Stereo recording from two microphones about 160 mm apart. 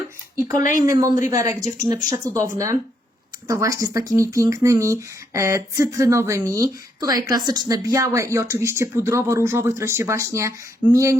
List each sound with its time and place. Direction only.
0.6 s speech: 55° left (ahead or behind)
0.9 s speech: 20° right (ahead or behind)